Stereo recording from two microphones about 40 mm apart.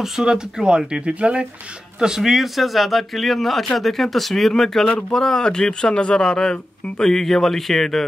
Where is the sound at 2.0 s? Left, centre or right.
Centre.